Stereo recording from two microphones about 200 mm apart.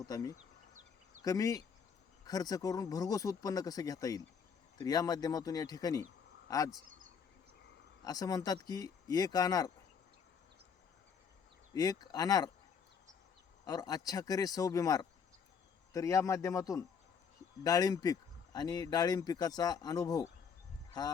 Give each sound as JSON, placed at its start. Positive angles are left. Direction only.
{"t": 0.0, "sound": "speech", "side_deg": 20}
{"t": 8.0, "sound": "speech", "side_deg": 20}
{"t": 11.7, "sound": "speech", "side_deg": 20}
{"t": 13.7, "sound": "speech", "side_deg": 20}